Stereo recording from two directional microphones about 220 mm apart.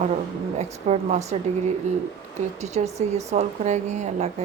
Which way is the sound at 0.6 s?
30° right (ahead or behind).